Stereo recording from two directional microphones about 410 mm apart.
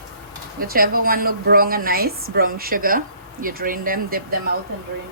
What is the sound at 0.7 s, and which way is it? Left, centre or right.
A woman's voice, right.